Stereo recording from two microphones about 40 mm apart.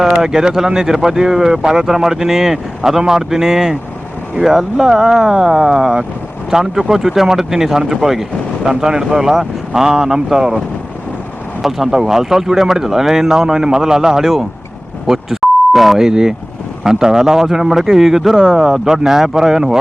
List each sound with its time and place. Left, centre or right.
0.0 s speech: centre
11.6 s speech: centre
15.0 s beep: centre
16.0 s speech: centre